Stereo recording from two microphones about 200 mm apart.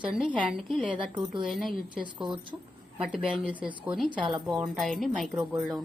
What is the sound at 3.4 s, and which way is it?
A woman's voice, 5° right (ahead or behind).